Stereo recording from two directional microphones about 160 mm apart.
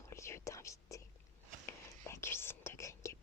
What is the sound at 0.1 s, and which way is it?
Whispering, 15° left (ahead or behind).